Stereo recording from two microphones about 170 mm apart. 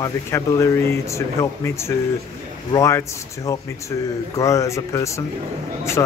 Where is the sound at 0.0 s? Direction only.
15° left (ahead or behind).